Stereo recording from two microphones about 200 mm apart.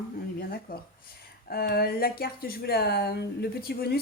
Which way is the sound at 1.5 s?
50° left (ahead or behind).